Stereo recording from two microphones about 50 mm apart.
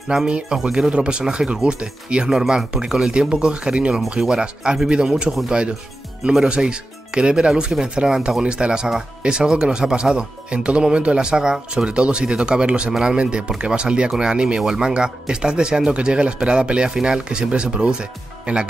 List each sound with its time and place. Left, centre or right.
0.1 s speech: centre